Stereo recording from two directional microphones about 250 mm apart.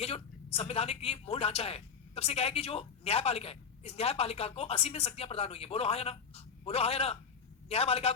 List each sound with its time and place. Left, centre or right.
0.0 s speech: left